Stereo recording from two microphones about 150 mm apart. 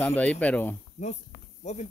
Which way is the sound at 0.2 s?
10° left (ahead or behind).